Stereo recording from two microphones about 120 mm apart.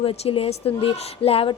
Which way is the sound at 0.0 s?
55° left (ahead or behind).